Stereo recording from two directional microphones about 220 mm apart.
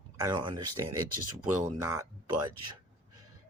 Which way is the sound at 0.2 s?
20° right (ahead or behind).